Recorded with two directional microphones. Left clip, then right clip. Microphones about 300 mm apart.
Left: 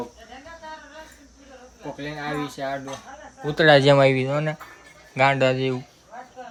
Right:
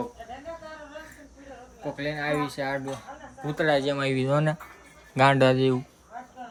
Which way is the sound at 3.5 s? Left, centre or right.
Left.